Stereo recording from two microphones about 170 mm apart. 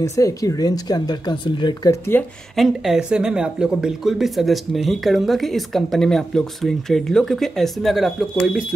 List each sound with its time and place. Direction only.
0.0 s speech: 20° left (ahead or behind)
2.5 s speech: centre (ahead or behind)